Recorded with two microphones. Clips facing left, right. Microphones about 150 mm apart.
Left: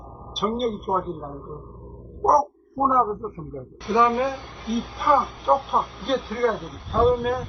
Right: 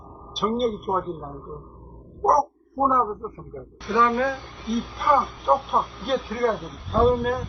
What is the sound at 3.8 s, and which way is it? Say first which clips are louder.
Speech: left 1 dB; 15° left (ahead or behind).